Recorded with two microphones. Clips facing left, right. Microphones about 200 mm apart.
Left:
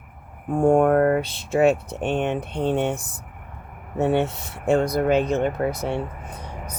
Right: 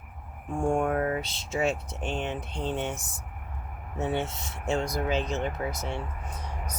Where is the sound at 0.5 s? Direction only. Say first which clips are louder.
Left 9 dB; 65° left (ahead or behind).